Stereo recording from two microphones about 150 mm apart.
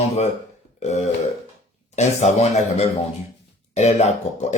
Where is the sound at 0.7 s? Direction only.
50° left (ahead or behind).